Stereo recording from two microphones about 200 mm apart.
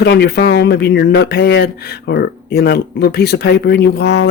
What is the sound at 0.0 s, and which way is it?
Speech, 60° left (ahead or behind).